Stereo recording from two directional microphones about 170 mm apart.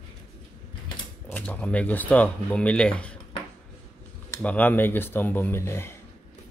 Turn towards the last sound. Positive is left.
turn(degrees=15)  # may be behind; listen again after turning